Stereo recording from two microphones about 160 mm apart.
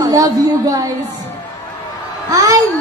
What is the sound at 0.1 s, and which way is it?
Speech, 25° right (ahead or behind).